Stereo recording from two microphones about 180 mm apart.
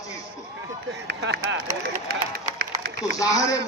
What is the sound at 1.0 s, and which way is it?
Speech, 70° right (ahead or behind).